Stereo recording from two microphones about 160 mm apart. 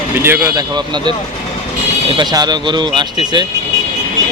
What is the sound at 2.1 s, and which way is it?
Speech, 25° right (ahead or behind).